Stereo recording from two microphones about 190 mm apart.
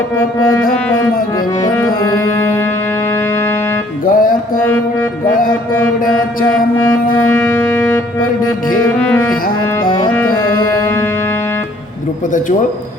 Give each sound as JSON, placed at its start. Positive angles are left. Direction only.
{"t": 2.0, "sound": "music", "side_deg": 15}
{"t": 4.0, "sound": "music", "side_deg": 45}
{"t": 7.3, "sound": "music", "side_deg": 5}
{"t": 9.1, "sound": "music", "side_deg": 5}
{"t": 9.8, "sound": "music", "side_deg": 20}